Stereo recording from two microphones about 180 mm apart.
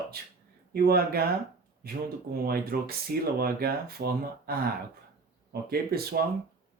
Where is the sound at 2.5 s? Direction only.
55° right (ahead or behind).